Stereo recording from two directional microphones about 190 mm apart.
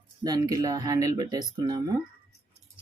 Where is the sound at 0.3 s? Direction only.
20° right (ahead or behind).